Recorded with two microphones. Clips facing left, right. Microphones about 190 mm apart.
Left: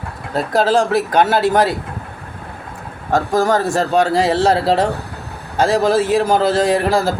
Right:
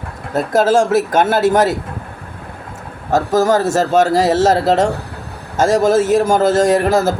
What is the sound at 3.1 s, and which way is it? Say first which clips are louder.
Speech: right 2 dB; 45° right (ahead or behind).